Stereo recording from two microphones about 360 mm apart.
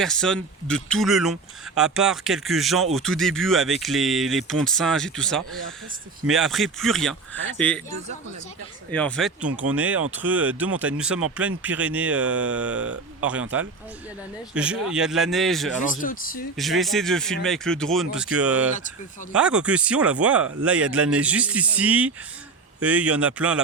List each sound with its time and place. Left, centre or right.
0.0 s speech: centre
8.9 s speech: centre
14.5 s speech: centre
15.8 s speech: left
16.6 s speech: centre